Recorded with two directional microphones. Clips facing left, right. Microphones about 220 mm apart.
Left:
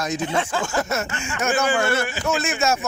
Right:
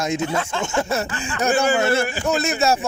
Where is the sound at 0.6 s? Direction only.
25° right (ahead or behind).